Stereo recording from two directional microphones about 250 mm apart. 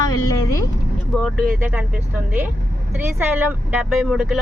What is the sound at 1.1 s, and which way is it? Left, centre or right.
Speech, centre.